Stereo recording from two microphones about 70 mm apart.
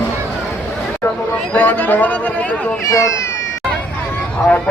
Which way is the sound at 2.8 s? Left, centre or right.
Left.